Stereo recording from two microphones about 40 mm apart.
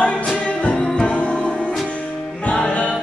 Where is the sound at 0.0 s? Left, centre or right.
Left.